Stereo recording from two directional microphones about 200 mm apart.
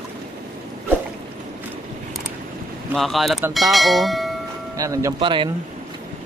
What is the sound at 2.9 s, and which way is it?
Speech, centre (ahead or behind).